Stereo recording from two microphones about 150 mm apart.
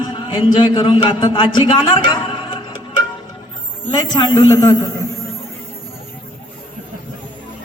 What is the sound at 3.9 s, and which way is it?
A man's voice, 30° left (ahead or behind).